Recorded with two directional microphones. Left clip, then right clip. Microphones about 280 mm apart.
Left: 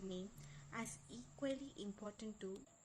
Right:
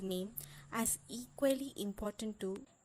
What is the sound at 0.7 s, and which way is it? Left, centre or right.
A woman's voice, right.